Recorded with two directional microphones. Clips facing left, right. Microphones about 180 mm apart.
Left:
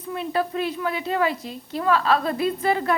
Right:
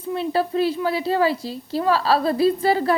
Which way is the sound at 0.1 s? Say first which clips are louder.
Right 3 dB; 30° right (ahead or behind).